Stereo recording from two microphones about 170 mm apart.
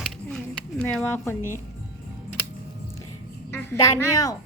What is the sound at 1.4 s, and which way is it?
Speech, 15° right (ahead or behind).